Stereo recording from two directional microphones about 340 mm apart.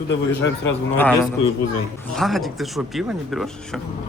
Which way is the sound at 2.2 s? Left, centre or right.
Centre.